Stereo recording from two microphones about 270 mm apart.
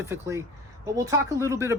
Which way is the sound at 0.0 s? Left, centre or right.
Centre.